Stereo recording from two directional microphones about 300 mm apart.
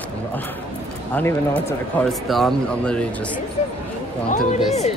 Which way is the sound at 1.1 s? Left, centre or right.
Centre.